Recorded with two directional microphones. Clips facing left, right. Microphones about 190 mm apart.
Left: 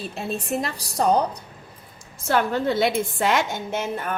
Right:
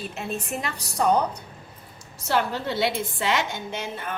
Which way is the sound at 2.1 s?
50° left (ahead or behind).